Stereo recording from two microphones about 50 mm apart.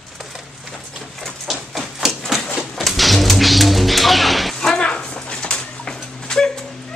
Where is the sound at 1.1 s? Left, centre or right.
Centre.